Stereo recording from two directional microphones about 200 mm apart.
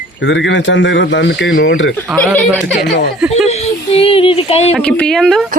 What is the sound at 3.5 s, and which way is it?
Speech, 30° left (ahead or behind).